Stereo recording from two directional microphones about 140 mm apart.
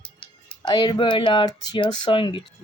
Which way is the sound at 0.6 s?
30° left (ahead or behind).